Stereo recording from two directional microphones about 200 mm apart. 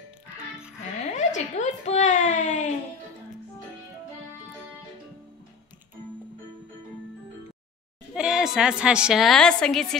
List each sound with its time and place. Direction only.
1.1 s a child's voice: 35° left (ahead or behind)
8.1 s a woman's voice: 5° right (ahead or behind)